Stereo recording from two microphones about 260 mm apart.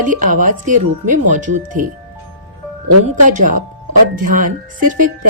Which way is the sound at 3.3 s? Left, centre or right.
Right.